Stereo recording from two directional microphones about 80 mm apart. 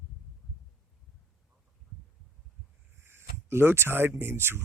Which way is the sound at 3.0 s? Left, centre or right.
Right.